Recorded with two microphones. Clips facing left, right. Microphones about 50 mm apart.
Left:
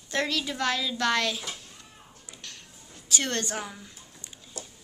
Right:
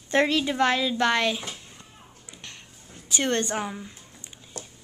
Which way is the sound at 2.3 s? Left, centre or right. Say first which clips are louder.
Right 1 dB; right.